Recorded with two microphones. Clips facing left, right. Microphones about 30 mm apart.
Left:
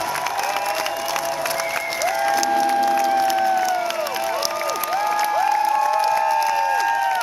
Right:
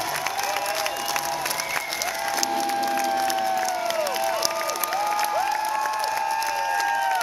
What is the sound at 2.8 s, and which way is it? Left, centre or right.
Music, centre.